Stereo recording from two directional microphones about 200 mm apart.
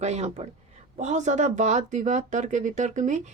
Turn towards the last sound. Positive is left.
turn(degrees=-35)  # may be behind; listen again after turning